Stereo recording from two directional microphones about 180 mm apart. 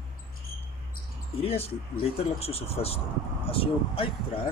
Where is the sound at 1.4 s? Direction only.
35° left (ahead or behind).